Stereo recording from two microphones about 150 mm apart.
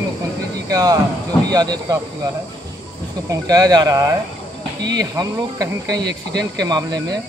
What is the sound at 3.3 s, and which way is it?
Speech, 25° right (ahead or behind).